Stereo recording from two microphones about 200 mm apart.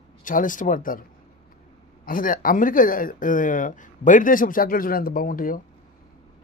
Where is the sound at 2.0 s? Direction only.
45° left (ahead or behind).